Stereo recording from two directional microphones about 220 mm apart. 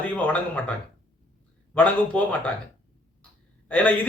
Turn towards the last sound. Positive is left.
turn(degrees=5)  # may be behind; listen again after turning